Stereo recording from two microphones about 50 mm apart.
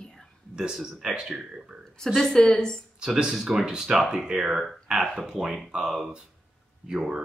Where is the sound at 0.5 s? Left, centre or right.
Centre.